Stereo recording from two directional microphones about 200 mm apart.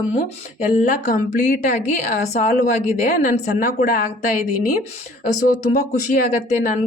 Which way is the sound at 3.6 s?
45° left (ahead or behind).